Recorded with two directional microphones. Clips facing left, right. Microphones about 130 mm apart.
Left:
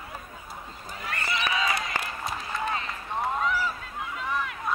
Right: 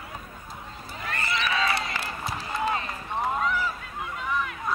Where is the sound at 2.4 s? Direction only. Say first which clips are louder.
Right 4 dB; 35° right (ahead or behind).